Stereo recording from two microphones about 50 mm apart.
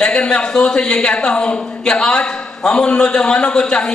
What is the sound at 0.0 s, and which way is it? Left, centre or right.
A man's voice, centre.